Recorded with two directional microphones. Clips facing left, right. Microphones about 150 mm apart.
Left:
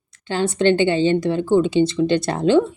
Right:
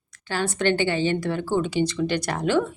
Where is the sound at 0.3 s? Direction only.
20° left (ahead or behind).